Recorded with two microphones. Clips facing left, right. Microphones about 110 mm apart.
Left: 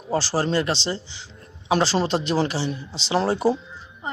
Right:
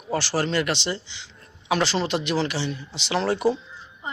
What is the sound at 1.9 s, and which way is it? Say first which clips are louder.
Speech: left 2 dB; 40° left (ahead or behind).